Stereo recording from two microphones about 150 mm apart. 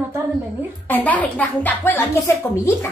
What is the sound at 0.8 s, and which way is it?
Speech, 10° left (ahead or behind).